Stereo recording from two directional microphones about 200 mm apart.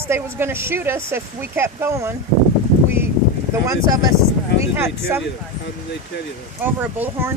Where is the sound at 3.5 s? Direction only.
15° right (ahead or behind).